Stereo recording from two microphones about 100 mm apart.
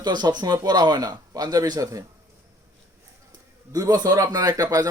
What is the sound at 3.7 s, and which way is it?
A man's voice, 40° right (ahead or behind).